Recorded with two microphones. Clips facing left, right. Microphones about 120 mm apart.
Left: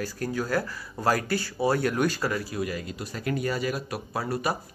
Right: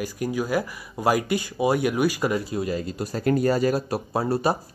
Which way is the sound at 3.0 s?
40° right (ahead or behind).